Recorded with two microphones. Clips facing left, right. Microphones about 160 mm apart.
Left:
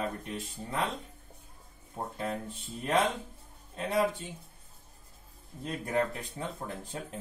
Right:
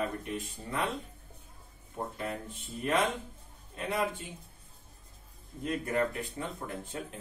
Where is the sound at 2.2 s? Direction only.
35° left (ahead or behind).